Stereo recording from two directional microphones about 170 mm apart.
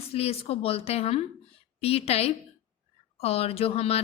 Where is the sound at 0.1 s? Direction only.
35° left (ahead or behind).